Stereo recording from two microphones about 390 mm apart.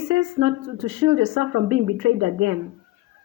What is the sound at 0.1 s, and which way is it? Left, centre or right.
A woman's voice, right.